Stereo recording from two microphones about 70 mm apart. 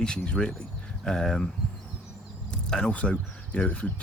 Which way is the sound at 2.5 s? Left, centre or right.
Centre.